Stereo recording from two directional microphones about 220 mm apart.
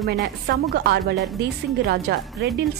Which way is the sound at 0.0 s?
45° right (ahead or behind).